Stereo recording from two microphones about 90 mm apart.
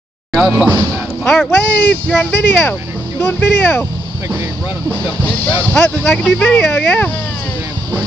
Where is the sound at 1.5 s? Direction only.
20° left (ahead or behind).